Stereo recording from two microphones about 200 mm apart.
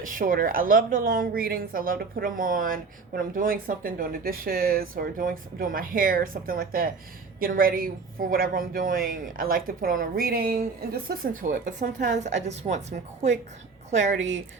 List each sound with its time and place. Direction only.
0.0 s a woman's voice: 45° right (ahead or behind)
13.9 s a woman's voice: 35° right (ahead or behind)